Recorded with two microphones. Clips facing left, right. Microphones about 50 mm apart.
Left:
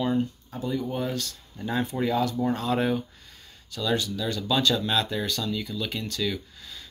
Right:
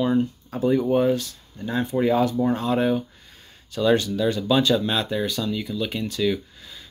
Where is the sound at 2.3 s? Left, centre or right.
Centre.